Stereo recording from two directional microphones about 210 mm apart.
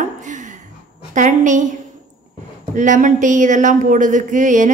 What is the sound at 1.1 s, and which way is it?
Speech, 35° right (ahead or behind).